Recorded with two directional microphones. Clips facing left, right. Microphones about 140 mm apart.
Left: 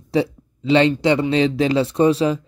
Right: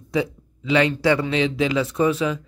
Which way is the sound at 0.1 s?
30° left (ahead or behind).